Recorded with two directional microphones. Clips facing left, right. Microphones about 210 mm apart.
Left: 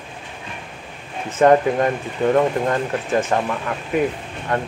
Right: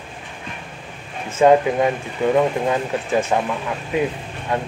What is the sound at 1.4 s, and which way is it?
Speech, 10° right (ahead or behind).